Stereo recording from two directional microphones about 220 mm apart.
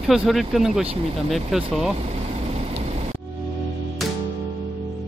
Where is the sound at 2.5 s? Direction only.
25° right (ahead or behind).